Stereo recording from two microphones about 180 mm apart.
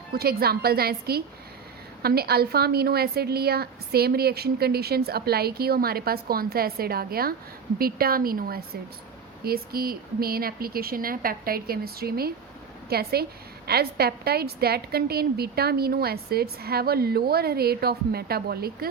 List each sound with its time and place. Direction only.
0.1 s a woman's voice: 60° right (ahead or behind)